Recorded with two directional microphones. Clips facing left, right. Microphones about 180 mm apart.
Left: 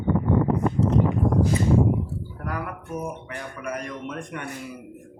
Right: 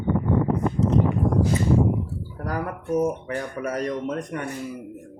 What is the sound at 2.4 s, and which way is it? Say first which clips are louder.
Speech: right 5 dB; 40° right (ahead or behind).